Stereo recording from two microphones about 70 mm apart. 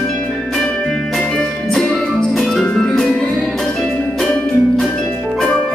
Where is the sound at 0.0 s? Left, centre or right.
Centre.